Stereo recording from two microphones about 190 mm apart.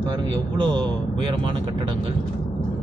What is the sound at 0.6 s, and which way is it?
Speech, 25° right (ahead or behind).